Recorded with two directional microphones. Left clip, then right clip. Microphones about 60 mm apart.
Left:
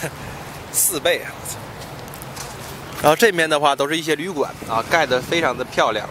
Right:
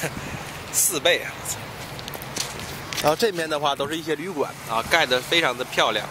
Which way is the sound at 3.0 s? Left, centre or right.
Left.